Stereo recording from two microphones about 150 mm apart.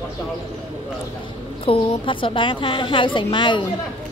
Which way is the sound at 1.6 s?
35° left (ahead or behind).